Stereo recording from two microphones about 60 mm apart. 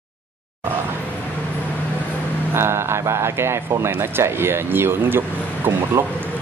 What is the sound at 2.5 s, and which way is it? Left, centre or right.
A man's voice, right.